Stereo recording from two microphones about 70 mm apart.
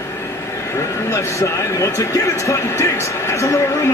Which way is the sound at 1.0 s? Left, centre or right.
Left.